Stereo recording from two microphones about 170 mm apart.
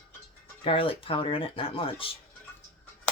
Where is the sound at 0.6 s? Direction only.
35° left (ahead or behind).